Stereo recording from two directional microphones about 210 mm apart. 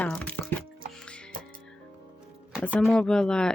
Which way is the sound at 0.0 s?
5° left (ahead or behind).